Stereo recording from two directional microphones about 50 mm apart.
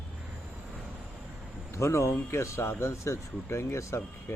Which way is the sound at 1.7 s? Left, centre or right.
Left.